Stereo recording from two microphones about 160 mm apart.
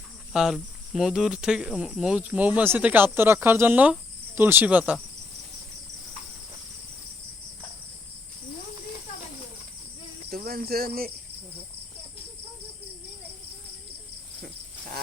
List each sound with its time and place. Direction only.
0.3 s speech: 5° right (ahead or behind)
10.2 s cricket: 70° right (ahead or behind)